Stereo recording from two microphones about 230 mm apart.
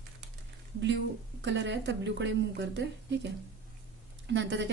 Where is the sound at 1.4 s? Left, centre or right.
Right.